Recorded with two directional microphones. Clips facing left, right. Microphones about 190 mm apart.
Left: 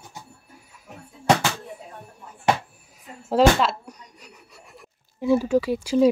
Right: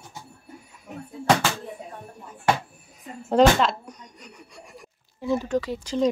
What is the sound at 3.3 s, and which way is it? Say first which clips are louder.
Speech: even; 5° left (ahead or behind).